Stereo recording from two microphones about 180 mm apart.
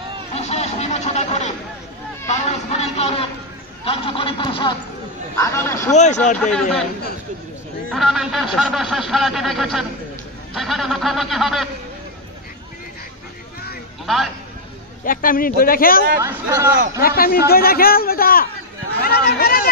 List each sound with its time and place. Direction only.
0.3 s a sound: 35° left (ahead or behind)
2.2 s a man's voice: 35° left (ahead or behind)
5.4 s speech: 15° left (ahead or behind)
5.9 s speech: 40° left (ahead or behind)
6.4 s speech: 5° left (ahead or behind)
7.9 s speech: centre (ahead or behind)
14.0 s a man's voice: centre (ahead or behind)
15.0 s a man's voice: 50° left (ahead or behind)
16.2 s speech: 15° right (ahead or behind)
17.0 s a man's voice: 55° left (ahead or behind)